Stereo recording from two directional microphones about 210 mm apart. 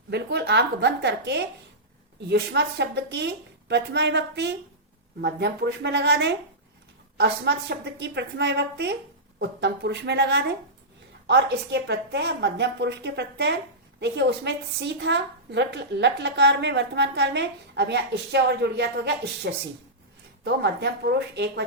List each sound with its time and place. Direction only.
0.1 s a woman's voice: 55° right (ahead or behind)